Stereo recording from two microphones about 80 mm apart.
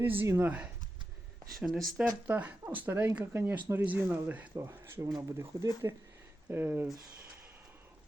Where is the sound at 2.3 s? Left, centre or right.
Centre.